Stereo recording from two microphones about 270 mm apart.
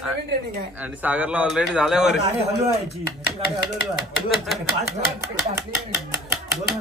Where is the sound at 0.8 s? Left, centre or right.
Centre.